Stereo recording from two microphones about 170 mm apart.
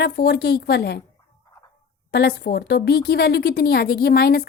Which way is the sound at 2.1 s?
70° left (ahead or behind).